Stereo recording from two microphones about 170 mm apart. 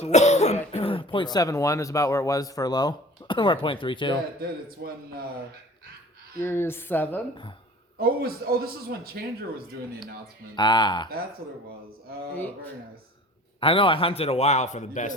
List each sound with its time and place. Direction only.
0.0 s cough: 40° left (ahead or behind)
0.7 s speech: 35° left (ahead or behind)
4.8 s a man's voice: 75° right (ahead or behind)
6.4 s a woman's voice: 15° left (ahead or behind)
7.9 s a man's voice: 60° right (ahead or behind)
10.5 s speech: 25° left (ahead or behind)
13.6 s a man's voice: 30° left (ahead or behind)